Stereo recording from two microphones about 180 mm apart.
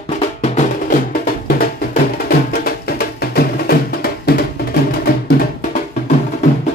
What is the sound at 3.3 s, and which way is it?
Music, 55° left (ahead or behind).